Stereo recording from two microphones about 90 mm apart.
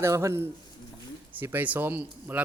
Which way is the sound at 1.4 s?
20° right (ahead or behind).